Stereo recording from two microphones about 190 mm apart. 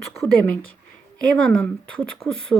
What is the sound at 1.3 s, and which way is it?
Speech, 5° left (ahead or behind).